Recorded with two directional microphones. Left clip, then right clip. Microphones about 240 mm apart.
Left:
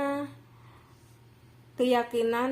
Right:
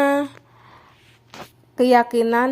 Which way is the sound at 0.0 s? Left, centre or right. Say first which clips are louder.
Right 12 dB; right.